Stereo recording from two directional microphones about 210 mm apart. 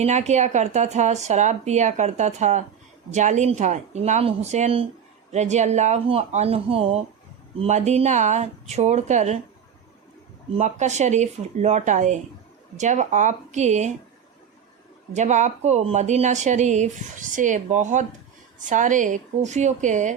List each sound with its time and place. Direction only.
0.0 s speech: 35° right (ahead or behind)
10.6 s speech: 35° right (ahead or behind)
15.1 s speech: 35° right (ahead or behind)